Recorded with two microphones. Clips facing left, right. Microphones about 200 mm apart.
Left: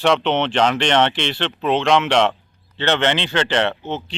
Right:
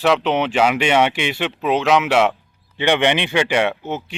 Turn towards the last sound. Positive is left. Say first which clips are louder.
# right 1 dB
turn(degrees=-10)  # may be behind; listen again after turning